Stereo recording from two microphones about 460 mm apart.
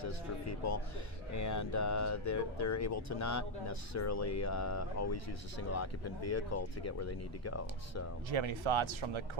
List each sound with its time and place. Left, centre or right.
0.0 s a sound: left
1.3 s speech: left
8.3 s speech: right